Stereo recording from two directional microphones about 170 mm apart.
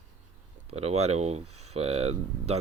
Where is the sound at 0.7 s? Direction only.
40° right (ahead or behind).